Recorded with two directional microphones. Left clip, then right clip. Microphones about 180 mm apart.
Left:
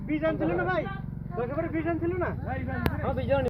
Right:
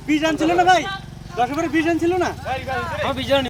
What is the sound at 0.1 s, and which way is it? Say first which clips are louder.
Speech: right 9 dB; 90° right.